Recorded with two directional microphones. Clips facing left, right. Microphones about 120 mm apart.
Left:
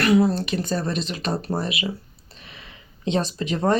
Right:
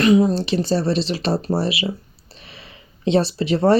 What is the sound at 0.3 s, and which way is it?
Speech, 30° right (ahead or behind).